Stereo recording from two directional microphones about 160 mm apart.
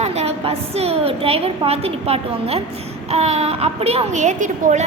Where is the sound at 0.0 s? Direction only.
40° right (ahead or behind).